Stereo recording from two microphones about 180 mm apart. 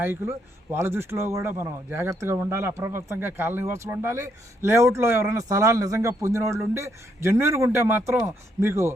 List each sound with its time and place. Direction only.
0.0 s speech: 10° right (ahead or behind)